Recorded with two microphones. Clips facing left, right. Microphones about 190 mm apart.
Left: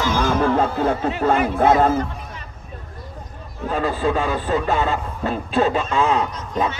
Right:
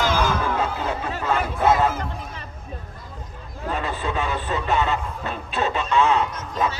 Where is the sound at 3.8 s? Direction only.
35° left (ahead or behind).